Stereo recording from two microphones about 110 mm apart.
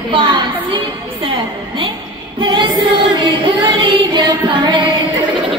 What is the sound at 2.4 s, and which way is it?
Speech, 45° right (ahead or behind).